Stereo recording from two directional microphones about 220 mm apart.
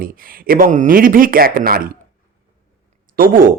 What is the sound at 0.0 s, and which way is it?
Speech, 40° right (ahead or behind).